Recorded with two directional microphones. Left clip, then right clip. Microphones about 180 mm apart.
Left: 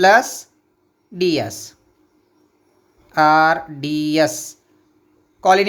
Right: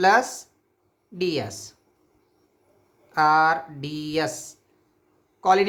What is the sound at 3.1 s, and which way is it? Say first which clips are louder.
Speech: left 5 dB; 35° left (ahead or behind).